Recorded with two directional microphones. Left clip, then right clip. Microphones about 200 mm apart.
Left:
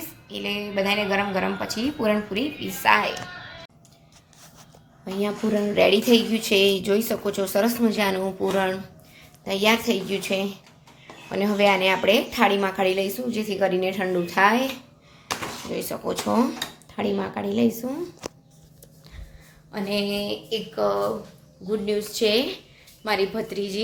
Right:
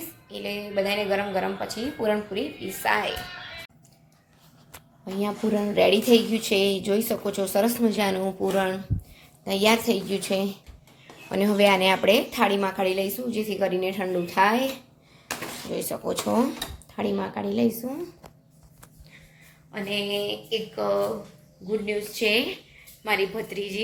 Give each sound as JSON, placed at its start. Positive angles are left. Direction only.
{"t": 0.3, "sound": "a woman's voice", "side_deg": 0}
{"t": 5.0, "sound": "a woman's voice", "side_deg": 0}
{"t": 15.7, "sound": "a woman's voice", "side_deg": -5}
{"t": 19.7, "sound": "a sound", "side_deg": 10}